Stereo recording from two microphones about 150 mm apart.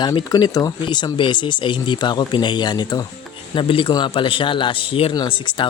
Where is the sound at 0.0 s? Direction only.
30° left (ahead or behind).